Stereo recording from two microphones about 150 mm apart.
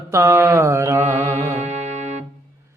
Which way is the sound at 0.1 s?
20° right (ahead or behind).